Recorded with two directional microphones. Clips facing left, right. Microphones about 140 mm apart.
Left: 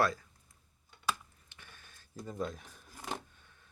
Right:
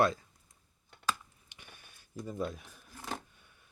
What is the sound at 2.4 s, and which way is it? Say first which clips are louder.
Speech: right 1 dB; 5° right (ahead or behind).